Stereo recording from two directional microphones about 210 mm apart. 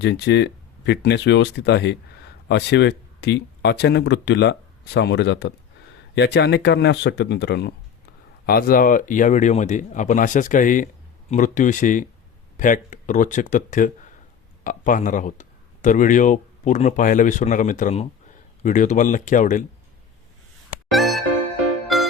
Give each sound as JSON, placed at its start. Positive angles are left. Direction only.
{"t": 0.0, "sound": "speech", "side_deg": 55}
{"t": 20.9, "sound": "music", "side_deg": 0}